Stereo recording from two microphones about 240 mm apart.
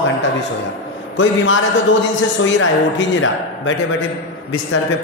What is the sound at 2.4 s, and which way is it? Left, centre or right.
Speech, left.